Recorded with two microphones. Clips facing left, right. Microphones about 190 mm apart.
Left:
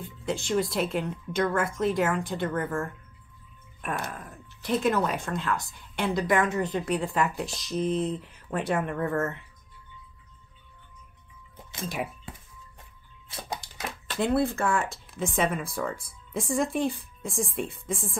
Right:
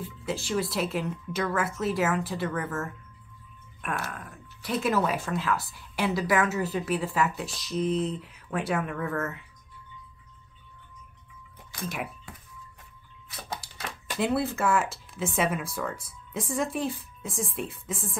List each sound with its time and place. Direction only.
0.0 s speech: 5° right (ahead or behind)
4.1 s speech: centre (ahead or behind)
11.8 s speech: centre (ahead or behind)
13.3 s a sound: 20° left (ahead or behind)
14.0 s speech: 5° right (ahead or behind)